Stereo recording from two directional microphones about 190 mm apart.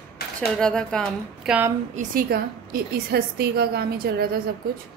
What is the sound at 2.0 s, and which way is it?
A woman's voice, 50° right (ahead or behind).